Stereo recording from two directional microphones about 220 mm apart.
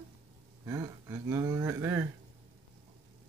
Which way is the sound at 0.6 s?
15° right (ahead or behind).